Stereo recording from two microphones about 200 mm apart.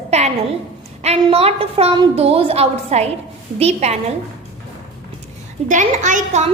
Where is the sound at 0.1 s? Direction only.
35° right (ahead or behind).